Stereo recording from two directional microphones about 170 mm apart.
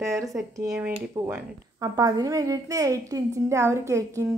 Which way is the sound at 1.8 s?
20° right (ahead or behind).